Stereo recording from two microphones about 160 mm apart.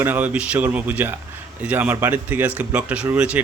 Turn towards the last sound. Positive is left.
turn(degrees=-5)  # may be behind; listen again after turning